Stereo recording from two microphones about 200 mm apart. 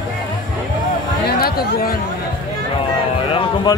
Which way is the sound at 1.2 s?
50° left (ahead or behind).